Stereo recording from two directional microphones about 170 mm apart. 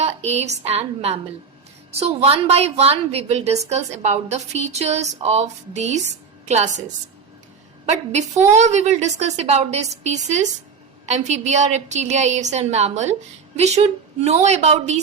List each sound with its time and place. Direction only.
0.0 s a woman's voice: 40° right (ahead or behind)
8.4 s a woman's voice: 45° right (ahead or behind)